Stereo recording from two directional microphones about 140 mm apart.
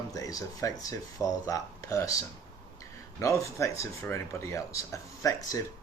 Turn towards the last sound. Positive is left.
turn(degrees=25)  # may be behind; listen again after turning